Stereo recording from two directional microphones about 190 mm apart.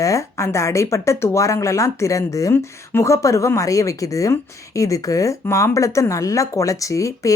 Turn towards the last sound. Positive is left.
turn(degrees=15)  # may be behind; listen again after turning